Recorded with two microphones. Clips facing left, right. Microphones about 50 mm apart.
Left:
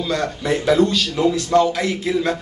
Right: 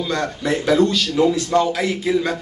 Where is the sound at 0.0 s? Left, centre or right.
Centre.